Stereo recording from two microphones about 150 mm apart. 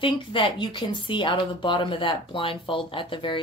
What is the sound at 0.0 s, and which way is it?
Speech, 35° left (ahead or behind).